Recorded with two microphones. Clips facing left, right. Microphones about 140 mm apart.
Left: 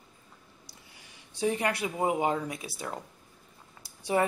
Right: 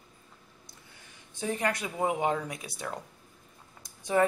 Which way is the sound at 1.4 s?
10° left (ahead or behind).